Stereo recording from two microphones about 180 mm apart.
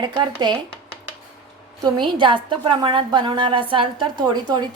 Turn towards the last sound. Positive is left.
turn(degrees=-25)  # may be behind; listen again after turning